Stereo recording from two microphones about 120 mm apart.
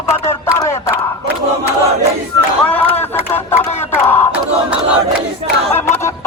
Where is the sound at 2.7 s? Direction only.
10° left (ahead or behind).